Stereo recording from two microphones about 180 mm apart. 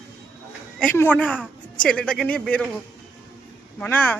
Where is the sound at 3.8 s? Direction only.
10° left (ahead or behind).